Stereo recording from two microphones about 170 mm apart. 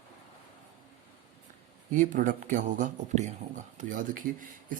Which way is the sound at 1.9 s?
50° right (ahead or behind).